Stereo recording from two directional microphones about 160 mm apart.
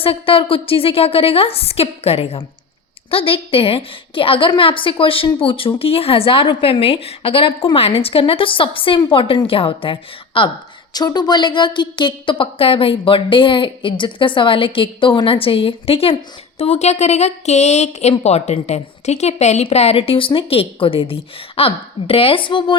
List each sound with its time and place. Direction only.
0.0 s a woman's voice: 35° left (ahead or behind)